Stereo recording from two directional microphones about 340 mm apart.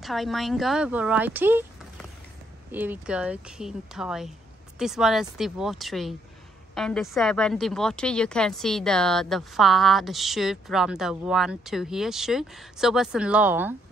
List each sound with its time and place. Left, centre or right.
0.0 s a woman's voice: centre